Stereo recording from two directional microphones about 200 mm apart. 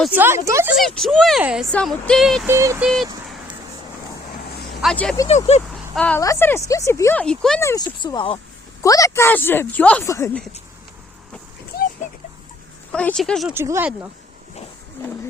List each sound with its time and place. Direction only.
0.1 s speech: 10° right (ahead or behind)
0.8 s speech: centre (ahead or behind)
2.5 s speech: 15° right (ahead or behind)
2.8 s speech: centre (ahead or behind)
4.8 s a woman's voice: centre (ahead or behind)
8.0 s a woman's voice: 25° left (ahead or behind)
12.9 s speech: 5° left (ahead or behind)
13.5 s speech: 10° right (ahead or behind)